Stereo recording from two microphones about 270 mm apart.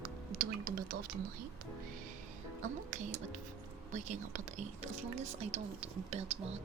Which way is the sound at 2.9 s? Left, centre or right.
Right.